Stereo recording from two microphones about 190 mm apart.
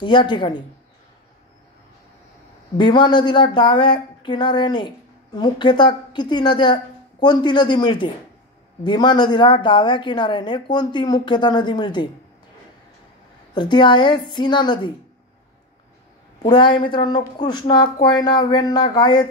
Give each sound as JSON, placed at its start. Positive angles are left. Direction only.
{"t": 0.0, "sound": "speech", "side_deg": 25}
{"t": 2.8, "sound": "speech", "side_deg": 25}
{"t": 13.6, "sound": "speech", "side_deg": 25}
{"t": 16.4, "sound": "speech", "side_deg": 25}